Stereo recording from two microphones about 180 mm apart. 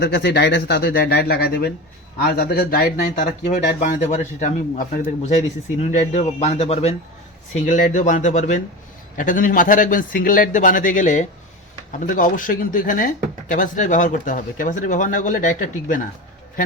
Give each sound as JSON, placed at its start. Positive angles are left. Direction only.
{"t": 0.0, "sound": "speech", "side_deg": 65}